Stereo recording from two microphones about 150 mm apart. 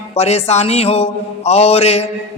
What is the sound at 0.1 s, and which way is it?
A man's voice, 45° left (ahead or behind).